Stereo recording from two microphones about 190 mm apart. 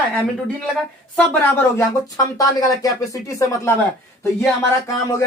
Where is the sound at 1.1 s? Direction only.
10° left (ahead or behind).